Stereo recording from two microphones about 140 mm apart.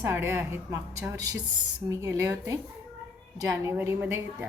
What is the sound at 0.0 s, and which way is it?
A woman's voice, 15° right (ahead or behind).